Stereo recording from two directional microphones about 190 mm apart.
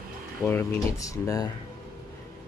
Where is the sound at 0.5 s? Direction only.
15° left (ahead or behind).